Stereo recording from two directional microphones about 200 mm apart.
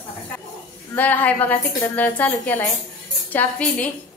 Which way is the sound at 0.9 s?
10° left (ahead or behind).